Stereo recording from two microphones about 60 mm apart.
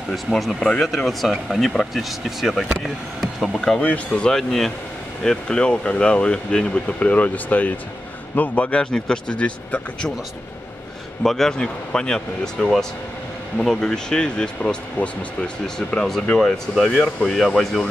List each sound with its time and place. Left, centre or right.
0.6 s speech: centre
0.8 s speech: centre
3.8 s speech: left
4.3 s speech: centre; by 8.8 s left
8.9 s speech: centre
11.2 s speech: centre